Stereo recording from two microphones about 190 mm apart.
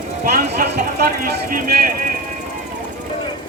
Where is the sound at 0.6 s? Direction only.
50° right (ahead or behind).